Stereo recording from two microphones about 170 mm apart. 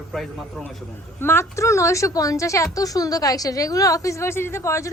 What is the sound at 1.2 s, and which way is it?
A woman's voice, 15° left (ahead or behind).